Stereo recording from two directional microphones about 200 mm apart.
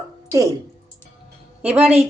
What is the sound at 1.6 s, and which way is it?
Speech, 5° right (ahead or behind).